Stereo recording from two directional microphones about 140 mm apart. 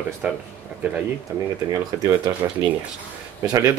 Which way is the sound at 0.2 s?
10° right (ahead or behind).